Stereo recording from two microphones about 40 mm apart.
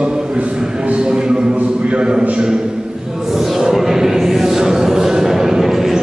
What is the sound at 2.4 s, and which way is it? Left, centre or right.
Chant, centre.